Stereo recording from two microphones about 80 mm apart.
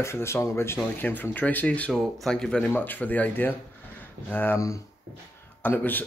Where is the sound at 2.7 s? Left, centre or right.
Left.